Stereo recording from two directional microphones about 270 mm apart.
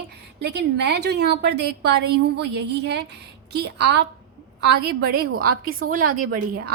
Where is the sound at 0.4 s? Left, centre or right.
Right.